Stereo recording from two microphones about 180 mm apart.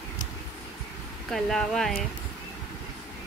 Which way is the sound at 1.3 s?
5° left (ahead or behind).